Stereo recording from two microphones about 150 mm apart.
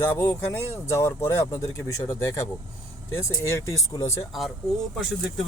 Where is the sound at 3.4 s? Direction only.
20° left (ahead or behind).